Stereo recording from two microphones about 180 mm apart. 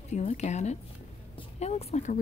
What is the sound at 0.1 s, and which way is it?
Speech, 40° left (ahead or behind).